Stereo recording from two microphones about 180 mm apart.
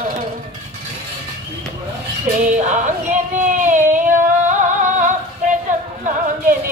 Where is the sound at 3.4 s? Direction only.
45° right (ahead or behind).